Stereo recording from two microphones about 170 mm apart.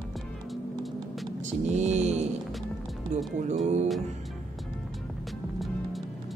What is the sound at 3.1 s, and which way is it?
Speech, 45° right (ahead or behind).